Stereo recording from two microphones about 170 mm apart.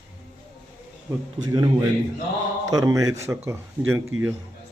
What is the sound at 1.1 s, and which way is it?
Speech, 10° right (ahead or behind).